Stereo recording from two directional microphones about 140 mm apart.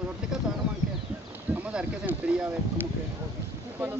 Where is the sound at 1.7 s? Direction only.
10° right (ahead or behind).